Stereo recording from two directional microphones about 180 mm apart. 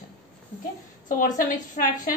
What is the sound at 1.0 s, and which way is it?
A woman's voice, 45° left (ahead or behind).